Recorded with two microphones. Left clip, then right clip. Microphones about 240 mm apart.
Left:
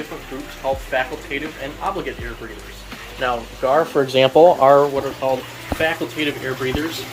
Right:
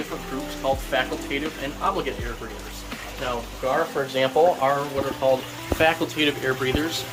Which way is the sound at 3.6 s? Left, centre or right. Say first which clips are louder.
Left 7 dB; centre.